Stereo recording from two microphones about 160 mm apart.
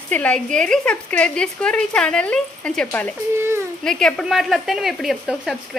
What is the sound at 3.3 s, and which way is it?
Speech, 15° right (ahead or behind).